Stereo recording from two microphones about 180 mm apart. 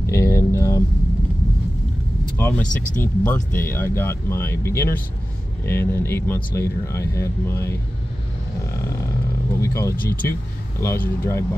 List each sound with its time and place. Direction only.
0.0 s a sound: 15° left (ahead or behind)
2.3 s speech: 10° left (ahead or behind)
9.6 s speech: 15° left (ahead or behind)